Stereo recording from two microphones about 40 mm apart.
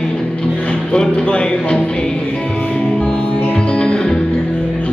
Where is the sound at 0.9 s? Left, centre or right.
Left.